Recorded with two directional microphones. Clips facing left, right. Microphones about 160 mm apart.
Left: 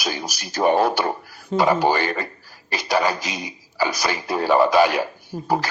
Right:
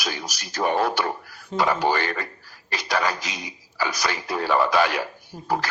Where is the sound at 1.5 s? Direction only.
60° left (ahead or behind).